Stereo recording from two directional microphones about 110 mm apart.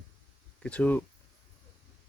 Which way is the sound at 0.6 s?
10° left (ahead or behind).